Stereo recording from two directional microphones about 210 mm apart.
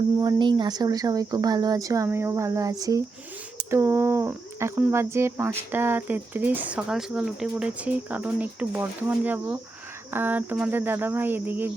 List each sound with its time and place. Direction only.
0.2 s speech: 20° right (ahead or behind)